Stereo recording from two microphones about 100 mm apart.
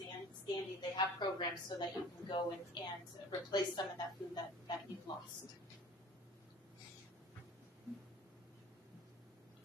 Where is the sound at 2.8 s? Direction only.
45° left (ahead or behind).